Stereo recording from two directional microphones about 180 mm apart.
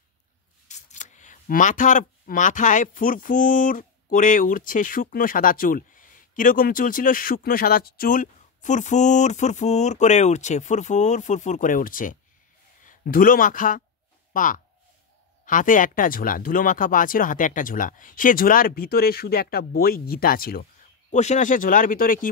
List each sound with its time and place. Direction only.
0.7 s speech: 40° left (ahead or behind)
21.1 s speech: 40° left (ahead or behind)